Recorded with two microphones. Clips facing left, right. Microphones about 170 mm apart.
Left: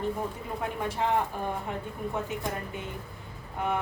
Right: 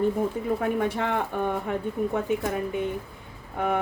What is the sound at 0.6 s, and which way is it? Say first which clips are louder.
Speech: right 1 dB; 65° right (ahead or behind).